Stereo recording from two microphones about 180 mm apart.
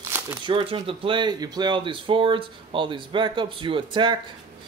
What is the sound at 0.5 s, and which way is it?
Speech, 25° right (ahead or behind).